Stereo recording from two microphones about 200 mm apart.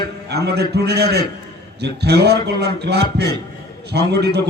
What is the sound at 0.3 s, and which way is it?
A man's voice, 55° right (ahead or behind).